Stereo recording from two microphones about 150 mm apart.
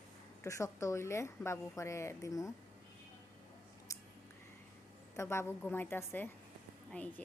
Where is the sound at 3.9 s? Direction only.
20° left (ahead or behind).